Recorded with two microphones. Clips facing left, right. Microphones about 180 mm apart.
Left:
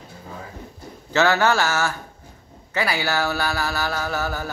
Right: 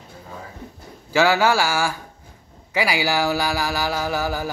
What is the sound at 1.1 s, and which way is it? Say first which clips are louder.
Speech: right 1 dB; 10° right (ahead or behind).